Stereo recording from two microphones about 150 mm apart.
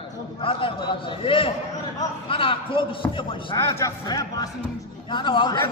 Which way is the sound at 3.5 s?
20° left (ahead or behind).